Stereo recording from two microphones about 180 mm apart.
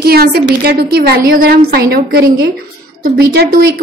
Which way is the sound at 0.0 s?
60° right (ahead or behind).